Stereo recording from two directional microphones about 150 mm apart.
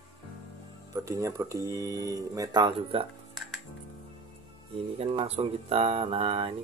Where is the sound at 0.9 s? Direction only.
20° right (ahead or behind); by 3.1 s 35° right (ahead or behind).